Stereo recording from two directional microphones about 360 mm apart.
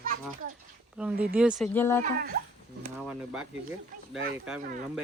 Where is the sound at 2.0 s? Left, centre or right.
Right.